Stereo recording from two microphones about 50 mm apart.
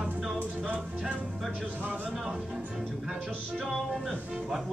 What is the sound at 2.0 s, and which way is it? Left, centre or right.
Speech, centre.